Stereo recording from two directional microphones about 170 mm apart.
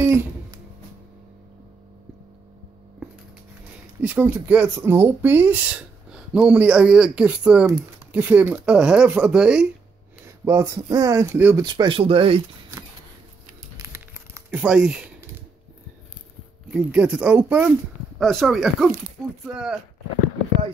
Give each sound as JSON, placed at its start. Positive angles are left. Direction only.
{"t": 0.0, "sound": "music", "side_deg": -15}
{"t": 4.0, "sound": "speech", "side_deg": -10}
{"t": 10.2, "sound": "speech", "side_deg": -15}
{"t": 11.6, "sound": "speech", "side_deg": -25}
{"t": 13.7, "sound": "a sound", "side_deg": -15}
{"t": 16.7, "sound": "speech", "side_deg": -5}